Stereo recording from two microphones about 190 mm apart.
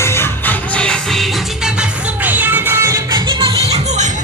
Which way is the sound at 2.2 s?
10° right (ahead or behind).